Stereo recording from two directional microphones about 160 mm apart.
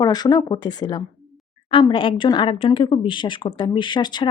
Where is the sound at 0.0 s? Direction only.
25° left (ahead or behind).